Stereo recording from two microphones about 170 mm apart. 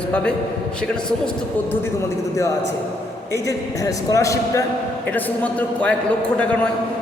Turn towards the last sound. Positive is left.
turn(degrees=10)  # may be behind; listen again after turning